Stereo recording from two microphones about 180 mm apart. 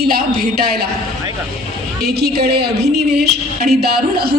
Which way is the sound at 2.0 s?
60° right (ahead or behind).